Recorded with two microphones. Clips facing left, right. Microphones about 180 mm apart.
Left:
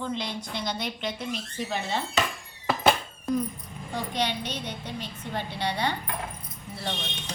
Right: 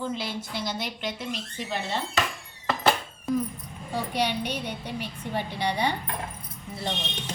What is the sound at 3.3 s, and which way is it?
A woman's voice, centre (ahead or behind).